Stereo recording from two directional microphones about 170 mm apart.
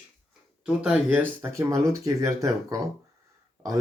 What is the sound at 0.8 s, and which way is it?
Speech, 10° right (ahead or behind).